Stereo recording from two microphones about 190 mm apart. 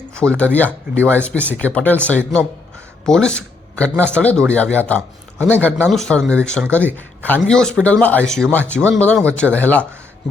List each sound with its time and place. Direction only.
0.1 s a man's voice: 5° left (ahead or behind)